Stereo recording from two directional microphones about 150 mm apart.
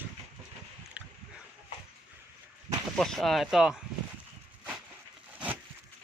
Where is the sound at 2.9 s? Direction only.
5° left (ahead or behind).